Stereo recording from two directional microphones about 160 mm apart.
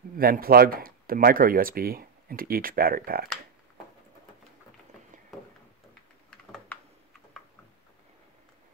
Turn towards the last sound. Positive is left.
turn(degrees=5)  # may be behind; listen again after turning